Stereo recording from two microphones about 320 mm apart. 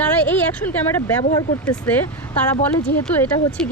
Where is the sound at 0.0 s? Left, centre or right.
Centre.